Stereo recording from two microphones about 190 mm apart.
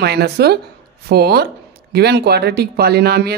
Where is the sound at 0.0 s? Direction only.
60° right (ahead or behind).